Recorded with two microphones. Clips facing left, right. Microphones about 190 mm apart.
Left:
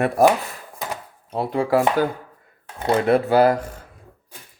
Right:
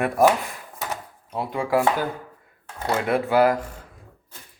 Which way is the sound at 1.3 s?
35° left (ahead or behind).